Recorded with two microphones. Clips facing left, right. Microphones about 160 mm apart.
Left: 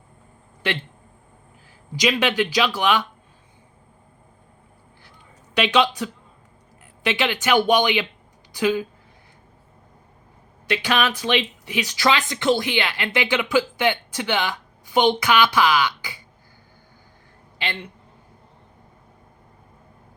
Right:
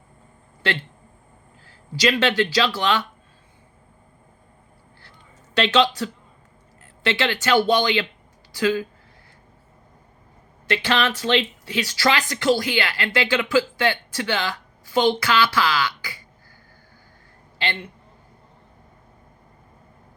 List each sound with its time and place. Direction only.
0.6 s speech: 15° left (ahead or behind)
5.5 s speech: 15° left (ahead or behind)
10.7 s speech: 15° left (ahead or behind)